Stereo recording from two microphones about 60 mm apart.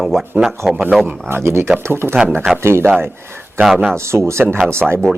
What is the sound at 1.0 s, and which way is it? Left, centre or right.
Speech, right.